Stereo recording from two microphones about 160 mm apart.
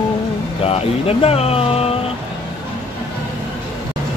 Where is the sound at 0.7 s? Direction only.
40° left (ahead or behind).